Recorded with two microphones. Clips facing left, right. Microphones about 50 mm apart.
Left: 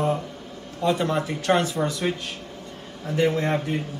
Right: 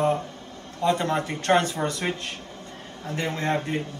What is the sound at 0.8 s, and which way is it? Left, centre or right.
Speech, right.